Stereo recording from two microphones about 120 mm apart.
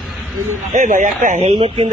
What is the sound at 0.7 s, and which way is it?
Speech, 90° right.